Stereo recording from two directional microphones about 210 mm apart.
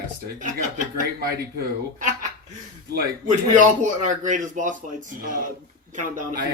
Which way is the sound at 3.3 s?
35° right (ahead or behind).